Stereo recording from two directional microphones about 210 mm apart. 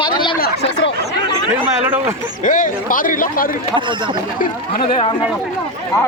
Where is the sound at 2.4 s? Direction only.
40° left (ahead or behind).